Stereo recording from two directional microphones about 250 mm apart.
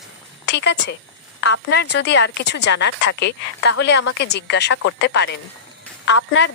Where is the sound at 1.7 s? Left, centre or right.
Left.